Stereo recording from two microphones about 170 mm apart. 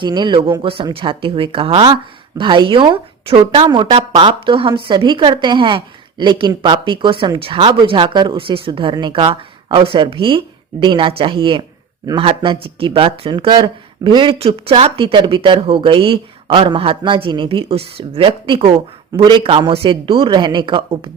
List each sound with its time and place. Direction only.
0.0 s a woman's voice: 25° right (ahead or behind)